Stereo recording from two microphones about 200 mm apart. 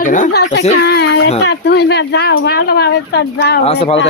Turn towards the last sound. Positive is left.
turn(degrees=30)  # may be behind; listen again after turning